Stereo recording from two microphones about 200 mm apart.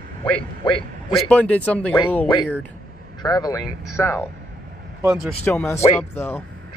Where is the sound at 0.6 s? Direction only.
25° left (ahead or behind).